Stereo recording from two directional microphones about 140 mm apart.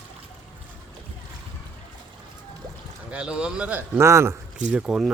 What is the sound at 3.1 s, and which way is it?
A man's voice, 10° right (ahead or behind).